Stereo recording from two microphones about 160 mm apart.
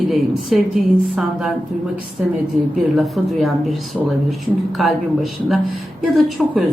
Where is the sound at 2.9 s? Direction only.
Centre (ahead or behind).